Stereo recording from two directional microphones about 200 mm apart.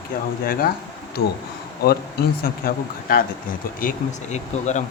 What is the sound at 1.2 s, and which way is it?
Speech, 50° left (ahead or behind).